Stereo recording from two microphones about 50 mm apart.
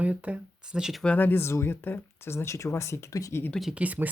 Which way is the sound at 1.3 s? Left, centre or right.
Left.